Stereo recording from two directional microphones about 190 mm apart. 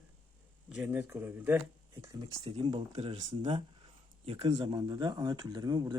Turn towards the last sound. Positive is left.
turn(degrees=-20)  # may be behind; listen again after turning